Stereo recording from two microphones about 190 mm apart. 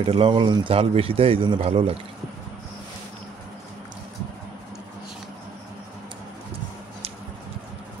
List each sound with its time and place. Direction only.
0.0 s a man's voice: 25° right (ahead or behind)